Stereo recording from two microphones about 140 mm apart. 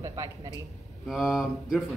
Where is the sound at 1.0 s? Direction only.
Centre (ahead or behind).